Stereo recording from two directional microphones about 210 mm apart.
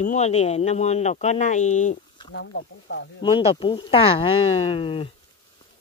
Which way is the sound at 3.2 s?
25° left (ahead or behind).